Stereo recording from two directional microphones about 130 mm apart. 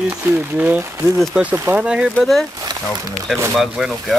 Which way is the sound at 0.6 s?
10° right (ahead or behind).